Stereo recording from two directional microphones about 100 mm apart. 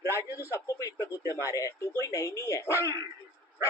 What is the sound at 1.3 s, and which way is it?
Speech, 30° left (ahead or behind).